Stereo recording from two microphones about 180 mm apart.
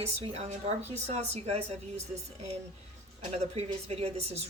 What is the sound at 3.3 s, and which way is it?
Speech, 35° right (ahead or behind).